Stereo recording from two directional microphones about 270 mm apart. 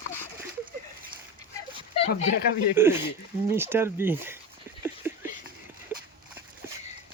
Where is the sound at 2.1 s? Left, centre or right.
Left.